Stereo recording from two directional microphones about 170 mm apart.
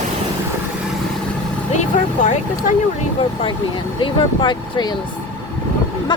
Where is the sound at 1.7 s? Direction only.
45° left (ahead or behind).